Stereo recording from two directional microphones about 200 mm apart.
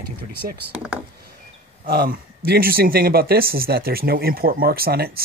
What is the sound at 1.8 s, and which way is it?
Speech, 50° right (ahead or behind).